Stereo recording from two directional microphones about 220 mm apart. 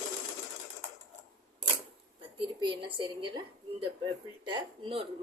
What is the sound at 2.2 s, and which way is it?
A woman's voice, 25° right (ahead or behind).